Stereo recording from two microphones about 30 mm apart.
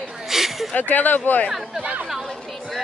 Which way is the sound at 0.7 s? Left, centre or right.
Left.